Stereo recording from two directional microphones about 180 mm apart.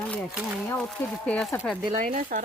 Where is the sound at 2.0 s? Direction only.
50° right (ahead or behind).